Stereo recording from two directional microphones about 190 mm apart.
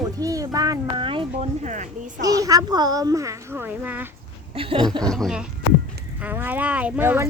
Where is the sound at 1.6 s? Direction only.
40° right (ahead or behind).